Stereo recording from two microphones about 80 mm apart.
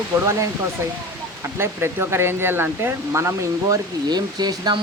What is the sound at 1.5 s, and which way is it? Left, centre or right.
Speech, right.